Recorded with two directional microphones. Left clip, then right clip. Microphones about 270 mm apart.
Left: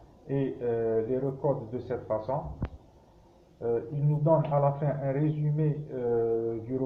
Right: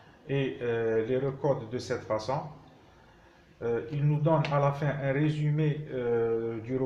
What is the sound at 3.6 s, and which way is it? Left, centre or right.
Speech, right.